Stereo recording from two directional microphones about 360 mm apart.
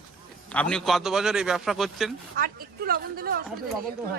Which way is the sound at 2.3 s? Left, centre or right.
Right.